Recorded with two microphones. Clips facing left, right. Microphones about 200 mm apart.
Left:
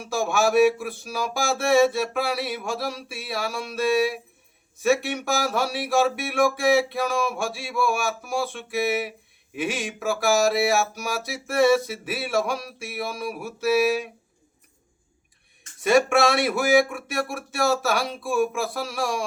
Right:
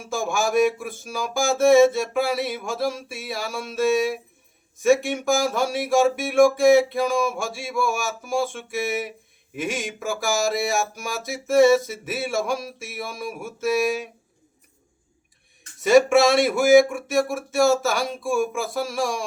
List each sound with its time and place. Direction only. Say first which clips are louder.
0.0 s music: left 2 dB; centre (ahead or behind)
15.8 s music: right 3 dB; centre (ahead or behind)